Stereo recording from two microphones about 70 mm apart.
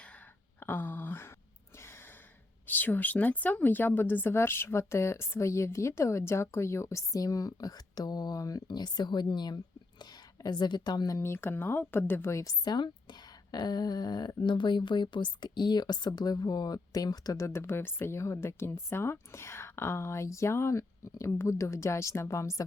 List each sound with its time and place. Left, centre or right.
0.6 s a sound: left
1.8 s gasp: left
2.6 s a woman's voice: left
11.2 s a woman's voice: left
12.6 s speech: left